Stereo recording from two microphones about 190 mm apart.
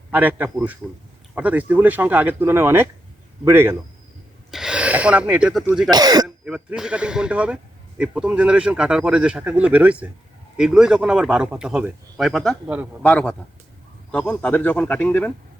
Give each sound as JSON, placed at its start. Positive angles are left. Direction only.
{"t": 0.1, "sound": "speech", "side_deg": -10}
{"t": 5.9, "sound": "speech", "side_deg": -20}
{"t": 6.2, "sound": "speech", "side_deg": -5}
{"t": 13.0, "sound": "speech", "side_deg": 5}